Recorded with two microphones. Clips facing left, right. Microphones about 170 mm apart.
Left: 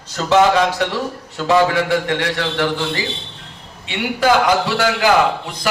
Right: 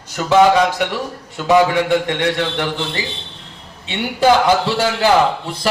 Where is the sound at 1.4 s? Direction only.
15° right (ahead or behind).